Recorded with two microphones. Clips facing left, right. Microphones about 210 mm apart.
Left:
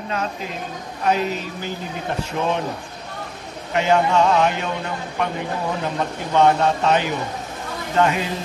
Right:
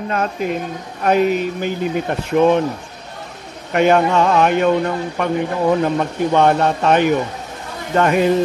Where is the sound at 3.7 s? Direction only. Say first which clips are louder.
Right 4 dB; 55° right (ahead or behind).